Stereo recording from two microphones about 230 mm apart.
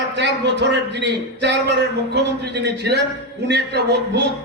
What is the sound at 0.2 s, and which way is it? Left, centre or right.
A man's voice, right.